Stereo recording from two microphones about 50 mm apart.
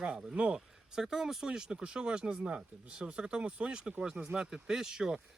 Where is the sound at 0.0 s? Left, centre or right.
Centre.